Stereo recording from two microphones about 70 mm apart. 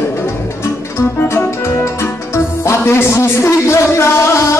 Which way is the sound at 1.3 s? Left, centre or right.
Left.